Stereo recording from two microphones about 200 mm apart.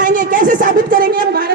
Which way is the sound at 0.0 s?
40° right (ahead or behind).